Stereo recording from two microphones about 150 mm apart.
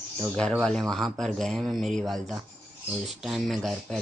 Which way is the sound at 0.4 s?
5° left (ahead or behind).